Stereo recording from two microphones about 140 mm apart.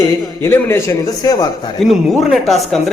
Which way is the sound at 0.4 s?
15° left (ahead or behind).